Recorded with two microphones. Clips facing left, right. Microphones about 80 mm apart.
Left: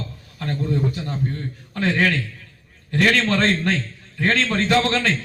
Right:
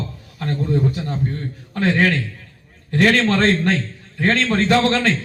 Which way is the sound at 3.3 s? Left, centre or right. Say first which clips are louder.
Right 3 dB; right.